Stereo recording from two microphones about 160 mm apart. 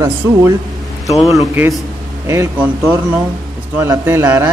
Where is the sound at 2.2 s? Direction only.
20° right (ahead or behind).